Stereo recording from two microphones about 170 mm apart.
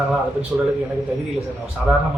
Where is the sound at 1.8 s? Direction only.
Centre (ahead or behind).